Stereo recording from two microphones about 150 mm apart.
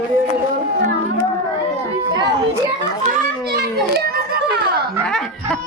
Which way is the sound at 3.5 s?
90° right.